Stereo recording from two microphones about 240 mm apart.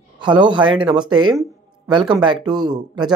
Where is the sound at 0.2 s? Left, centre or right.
Centre.